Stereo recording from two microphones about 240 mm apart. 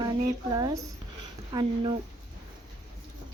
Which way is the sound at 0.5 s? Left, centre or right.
Centre.